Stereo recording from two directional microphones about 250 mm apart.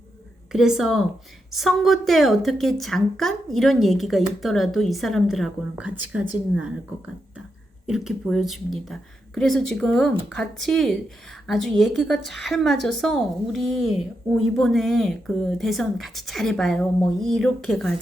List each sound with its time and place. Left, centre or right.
0.5 s a woman's voice: centre